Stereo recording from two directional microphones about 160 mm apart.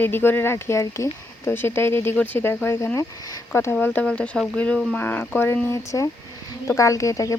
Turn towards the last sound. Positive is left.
turn(degrees=20)  # may be behind; listen again after turning